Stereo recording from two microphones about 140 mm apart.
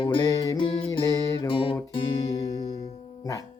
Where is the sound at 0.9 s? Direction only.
25° left (ahead or behind).